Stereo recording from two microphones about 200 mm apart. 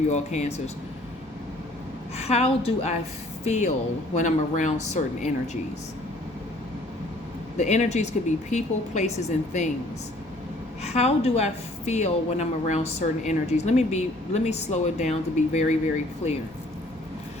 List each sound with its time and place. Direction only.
0.1 s a woman's voice: 35° left (ahead or behind)
2.1 s a woman's voice: 30° left (ahead or behind)
7.6 s a woman's voice: 35° left (ahead or behind)
10.8 s a woman's voice: 30° left (ahead or behind)